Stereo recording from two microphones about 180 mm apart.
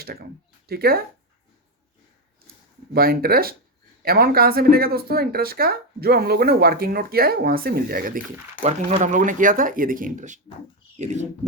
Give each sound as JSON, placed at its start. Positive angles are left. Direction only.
{"t": 0.0, "sound": "speech", "side_deg": -60}
{"t": 2.9, "sound": "speech", "side_deg": -55}